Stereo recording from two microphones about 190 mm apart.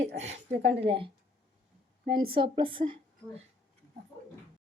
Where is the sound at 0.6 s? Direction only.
65° right (ahead or behind).